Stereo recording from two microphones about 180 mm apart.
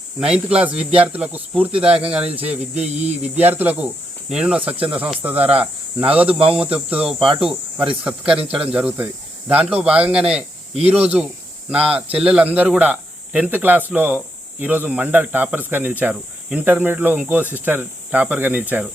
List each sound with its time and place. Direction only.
0.2 s speech: 5° right (ahead or behind)
2.8 s speech: 40° right (ahead or behind)
3.3 s speech: 10° right (ahead or behind)
6.2 s speech: 30° right (ahead or behind)
6.7 s speech: 5° right (ahead or behind)
7.2 s speech: 30° right (ahead or behind)
8.5 s speech: 5° right (ahead or behind)